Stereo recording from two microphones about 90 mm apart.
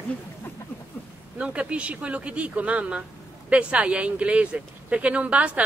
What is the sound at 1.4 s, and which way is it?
Speech, 10° right (ahead or behind).